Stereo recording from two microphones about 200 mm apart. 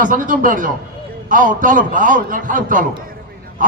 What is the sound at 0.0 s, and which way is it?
A man's voice, 40° right (ahead or behind).